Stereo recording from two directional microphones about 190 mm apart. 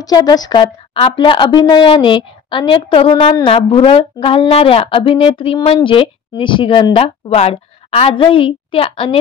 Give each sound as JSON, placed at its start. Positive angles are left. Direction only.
{"t": 0.0, "sound": "speech", "side_deg": 20}